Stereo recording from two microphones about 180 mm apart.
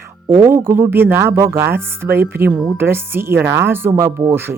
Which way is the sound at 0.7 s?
10° right (ahead or behind).